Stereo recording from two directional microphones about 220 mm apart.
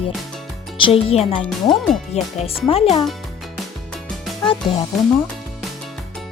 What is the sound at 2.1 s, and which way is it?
Speech, 30° left (ahead or behind).